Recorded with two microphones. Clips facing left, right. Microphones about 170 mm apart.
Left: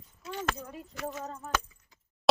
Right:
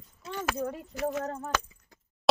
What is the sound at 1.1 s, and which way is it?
Speech, 75° right (ahead or behind).